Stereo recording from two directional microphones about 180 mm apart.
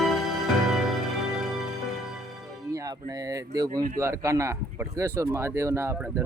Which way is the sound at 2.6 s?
20° right (ahead or behind).